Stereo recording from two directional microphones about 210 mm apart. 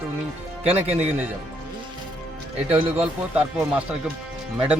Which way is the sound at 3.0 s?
5° right (ahead or behind).